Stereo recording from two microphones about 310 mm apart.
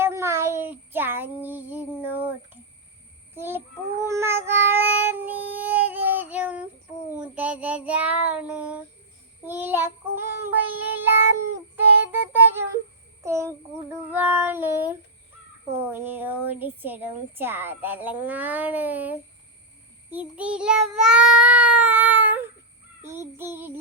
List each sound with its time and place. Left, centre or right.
0.0 s child singing: centre
13.2 s a child's voice: centre
14.1 s child singing: centre
15.8 s speech: centre
23.0 s child singing: centre